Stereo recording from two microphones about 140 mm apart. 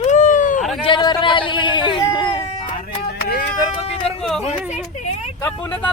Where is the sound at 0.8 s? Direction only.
35° left (ahead or behind).